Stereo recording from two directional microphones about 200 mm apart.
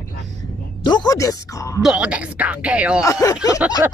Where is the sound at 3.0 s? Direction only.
15° left (ahead or behind).